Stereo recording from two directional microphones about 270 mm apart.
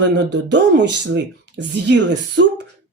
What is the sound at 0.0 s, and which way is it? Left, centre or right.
Speech, right.